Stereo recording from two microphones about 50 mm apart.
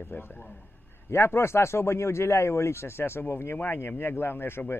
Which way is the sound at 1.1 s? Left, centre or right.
Left.